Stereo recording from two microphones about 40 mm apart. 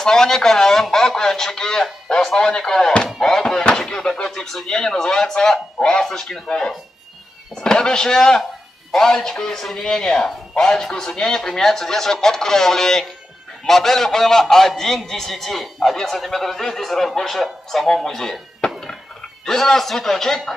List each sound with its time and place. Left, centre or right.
0.0 s a man's voice: centre
3.4 s knock: left
3.7 s a man's voice: centre
7.6 s a man's voice: centre
18.6 s a sound: left
19.4 s a man's voice: centre